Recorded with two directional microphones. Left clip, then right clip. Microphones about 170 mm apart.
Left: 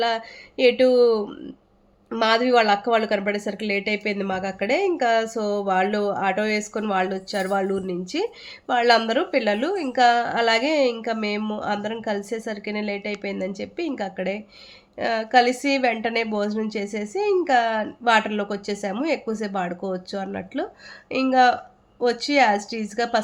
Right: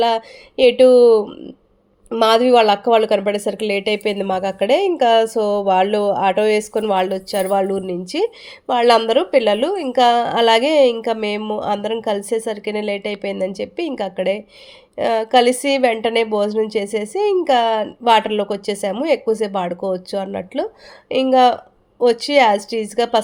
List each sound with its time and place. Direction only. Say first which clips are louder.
0.0 s a woman's voice: right 6 dB; 35° right (ahead or behind)